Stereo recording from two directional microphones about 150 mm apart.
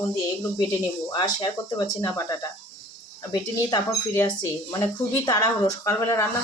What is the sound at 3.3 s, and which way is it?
Speech, 25° left (ahead or behind).